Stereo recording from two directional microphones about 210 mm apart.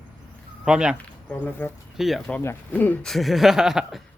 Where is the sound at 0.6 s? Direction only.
5° right (ahead or behind).